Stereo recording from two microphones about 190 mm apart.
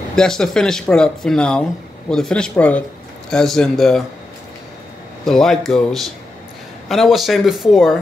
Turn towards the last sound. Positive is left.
turn(degrees=0)  # may be behind; listen again after turning